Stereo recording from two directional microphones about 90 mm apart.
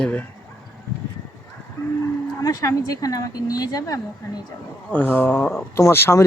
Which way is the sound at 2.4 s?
40° left (ahead or behind).